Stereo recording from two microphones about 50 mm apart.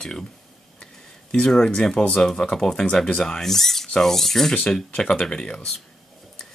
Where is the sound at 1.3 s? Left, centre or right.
Centre.